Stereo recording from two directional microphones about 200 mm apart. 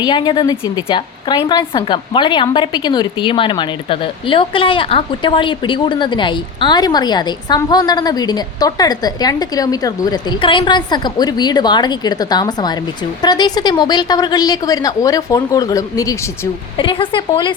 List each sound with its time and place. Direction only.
0.0 s a woman's voice: 20° left (ahead or behind)